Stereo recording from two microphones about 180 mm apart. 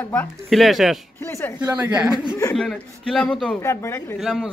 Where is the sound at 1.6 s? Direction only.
5° right (ahead or behind).